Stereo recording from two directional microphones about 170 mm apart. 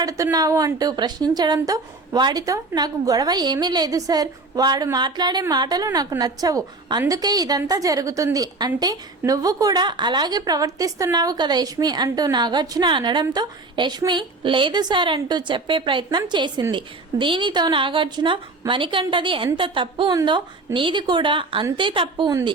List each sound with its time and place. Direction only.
0.0 s a woman's voice: 20° right (ahead or behind)